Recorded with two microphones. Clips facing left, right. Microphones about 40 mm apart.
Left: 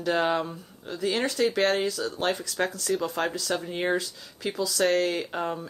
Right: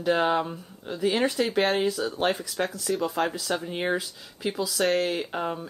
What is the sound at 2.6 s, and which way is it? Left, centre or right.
Speech, centre.